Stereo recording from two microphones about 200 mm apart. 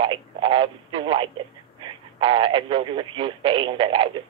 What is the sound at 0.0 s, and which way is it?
Telephone, 25° right (ahead or behind).